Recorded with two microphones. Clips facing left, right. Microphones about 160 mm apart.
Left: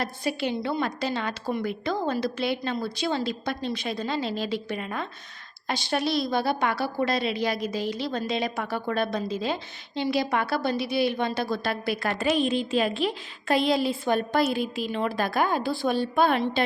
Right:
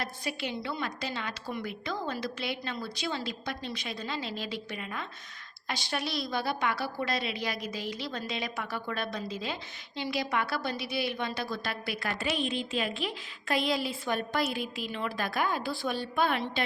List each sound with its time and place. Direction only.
0.0 s a woman's voice: 35° left (ahead or behind)